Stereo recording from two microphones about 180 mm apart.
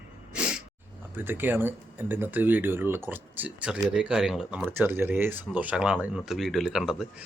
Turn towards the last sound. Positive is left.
turn(degrees=-5)  # may be behind; listen again after turning